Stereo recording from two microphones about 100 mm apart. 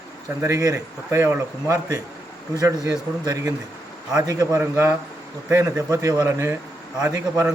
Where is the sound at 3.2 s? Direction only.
40° right (ahead or behind); by 4.9 s 25° right (ahead or behind).